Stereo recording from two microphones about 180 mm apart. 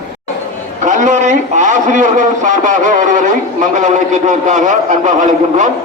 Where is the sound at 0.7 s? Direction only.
45° right (ahead or behind).